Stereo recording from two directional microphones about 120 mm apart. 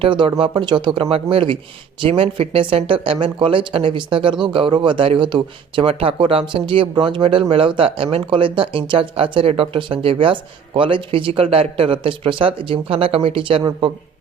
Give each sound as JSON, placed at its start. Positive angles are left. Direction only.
{"t": 0.0, "sound": "speech", "side_deg": -45}